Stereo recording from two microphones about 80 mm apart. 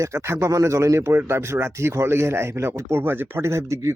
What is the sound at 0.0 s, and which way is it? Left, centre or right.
Speech, right.